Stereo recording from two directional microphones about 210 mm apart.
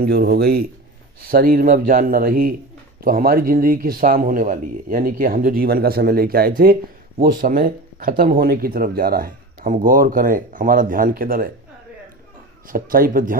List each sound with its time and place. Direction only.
0.0 s speech: 50° right (ahead or behind)
12.6 s a man's voice: 40° right (ahead or behind)